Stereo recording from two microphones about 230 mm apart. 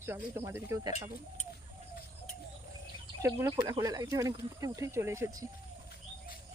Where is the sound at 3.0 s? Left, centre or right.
Centre.